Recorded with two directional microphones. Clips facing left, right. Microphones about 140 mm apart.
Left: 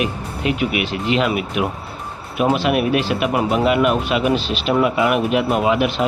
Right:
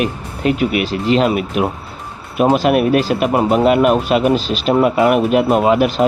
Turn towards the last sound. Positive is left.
turn(degrees=-40)  # may be behind; listen again after turning